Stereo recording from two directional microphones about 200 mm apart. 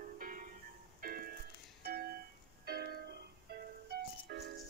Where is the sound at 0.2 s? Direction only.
45° right (ahead or behind).